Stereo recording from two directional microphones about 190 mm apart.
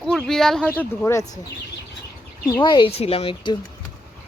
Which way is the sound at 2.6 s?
25° left (ahead or behind).